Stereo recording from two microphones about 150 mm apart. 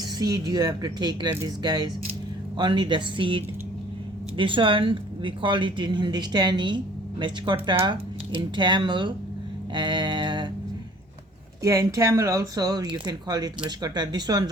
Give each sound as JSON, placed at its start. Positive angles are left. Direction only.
{"t": 0.2, "sound": "speech", "side_deg": -25}
{"t": 9.7, "sound": "a sound", "side_deg": -30}
{"t": 11.6, "sound": "speech", "side_deg": -20}